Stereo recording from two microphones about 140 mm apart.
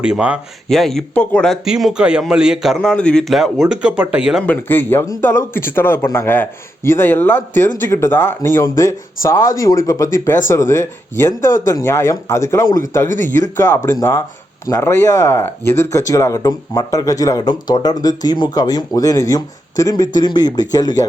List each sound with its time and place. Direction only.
0.0 s speech: 10° right (ahead or behind)
0.7 s a man's voice: centre (ahead or behind)
1.6 s a man's voice: 5° right (ahead or behind)
4.4 s speech: 15° left (ahead or behind)